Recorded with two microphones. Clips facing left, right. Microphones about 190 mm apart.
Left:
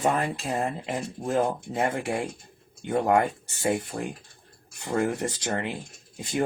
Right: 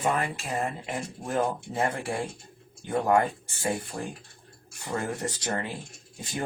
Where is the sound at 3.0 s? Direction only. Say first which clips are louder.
Even; 20° left (ahead or behind).